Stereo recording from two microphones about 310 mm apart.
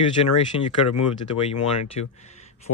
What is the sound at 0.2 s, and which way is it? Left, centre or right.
Speech, left.